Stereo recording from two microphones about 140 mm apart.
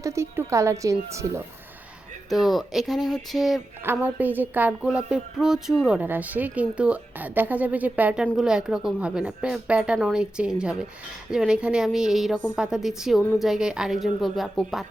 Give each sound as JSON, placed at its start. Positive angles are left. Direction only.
{"t": 0.0, "sound": "a woman's voice", "side_deg": -20}
{"t": 2.3, "sound": "a woman's voice", "side_deg": 0}
{"t": 4.0, "sound": "a woman's voice", "side_deg": -10}